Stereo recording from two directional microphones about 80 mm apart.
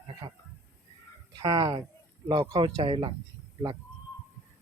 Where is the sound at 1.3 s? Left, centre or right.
Right.